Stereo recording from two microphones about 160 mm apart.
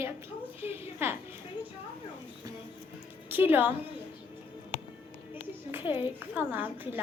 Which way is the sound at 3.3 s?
10° right (ahead or behind).